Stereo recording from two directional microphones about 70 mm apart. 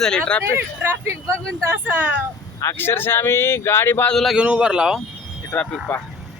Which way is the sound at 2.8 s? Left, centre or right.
Left.